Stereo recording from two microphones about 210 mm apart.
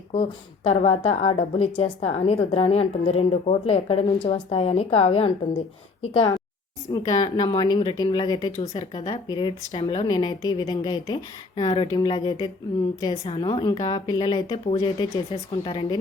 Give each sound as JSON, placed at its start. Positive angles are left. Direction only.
{"t": 0.1, "sound": "speech", "side_deg": 30}